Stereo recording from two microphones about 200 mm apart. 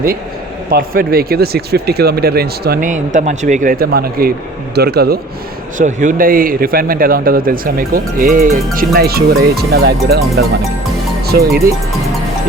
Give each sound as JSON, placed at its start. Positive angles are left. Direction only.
{"t": 0.7, "sound": "speech", "side_deg": -45}
{"t": 5.7, "sound": "speech", "side_deg": -40}